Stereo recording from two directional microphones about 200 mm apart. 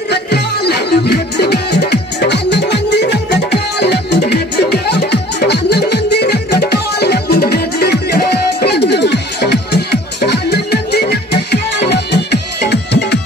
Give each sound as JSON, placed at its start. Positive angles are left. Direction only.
{"t": 0.1, "sound": "music", "side_deg": 55}